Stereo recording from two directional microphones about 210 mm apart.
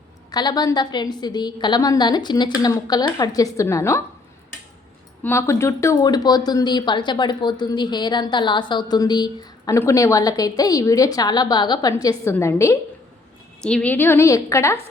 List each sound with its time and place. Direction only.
0.3 s speech: 20° left (ahead or behind)
5.2 s a woman's voice: 10° left (ahead or behind)